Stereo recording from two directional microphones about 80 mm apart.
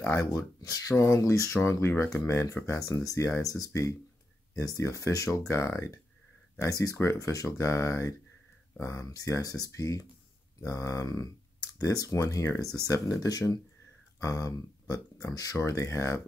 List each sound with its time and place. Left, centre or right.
0.1 s speech: left
0.9 s speech: left
6.6 s speech: left